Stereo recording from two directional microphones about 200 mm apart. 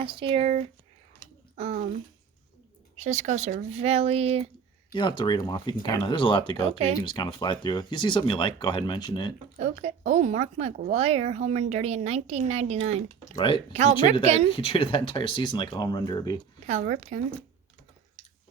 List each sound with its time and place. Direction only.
0.0 s speech: 25° right (ahead or behind)
3.0 s speech: 35° right (ahead or behind)
4.9 s speech: 25° left (ahead or behind)
9.6 s speech: 35° right (ahead or behind)
13.3 s speech: 25° left (ahead or behind)
13.7 s speech: 35° right (ahead or behind)
14.5 s speech: 25° left (ahead or behind)
16.6 s speech: 40° right (ahead or behind)